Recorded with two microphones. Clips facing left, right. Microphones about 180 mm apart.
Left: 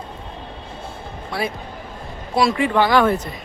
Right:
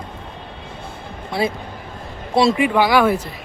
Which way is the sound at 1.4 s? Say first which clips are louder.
Right 4 dB; 25° right (ahead or behind).